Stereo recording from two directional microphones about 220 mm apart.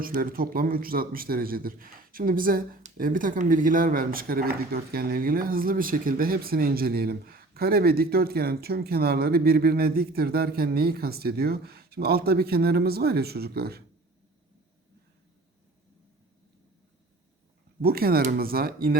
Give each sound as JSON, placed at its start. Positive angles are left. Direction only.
{"t": 0.0, "sound": "speech", "side_deg": -40}
{"t": 17.8, "sound": "speech", "side_deg": -45}